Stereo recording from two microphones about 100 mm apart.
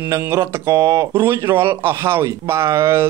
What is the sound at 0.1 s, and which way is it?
Speech, 30° right (ahead or behind).